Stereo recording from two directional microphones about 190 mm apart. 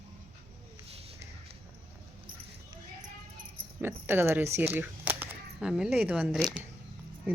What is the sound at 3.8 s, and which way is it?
Speech, 10° right (ahead or behind).